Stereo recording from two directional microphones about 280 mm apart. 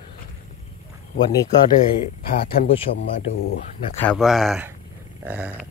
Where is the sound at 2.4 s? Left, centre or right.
Left.